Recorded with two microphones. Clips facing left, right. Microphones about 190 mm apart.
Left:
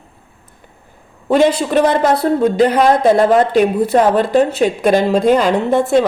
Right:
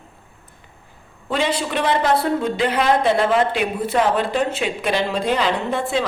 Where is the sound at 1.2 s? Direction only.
45° left (ahead or behind).